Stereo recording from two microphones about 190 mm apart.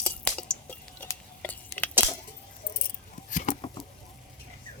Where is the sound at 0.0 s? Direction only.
5° left (ahead or behind).